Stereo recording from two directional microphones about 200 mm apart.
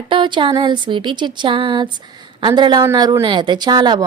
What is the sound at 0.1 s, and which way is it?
Speech, 25° right (ahead or behind).